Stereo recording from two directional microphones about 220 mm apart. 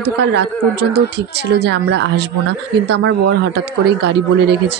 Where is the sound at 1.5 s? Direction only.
50° right (ahead or behind).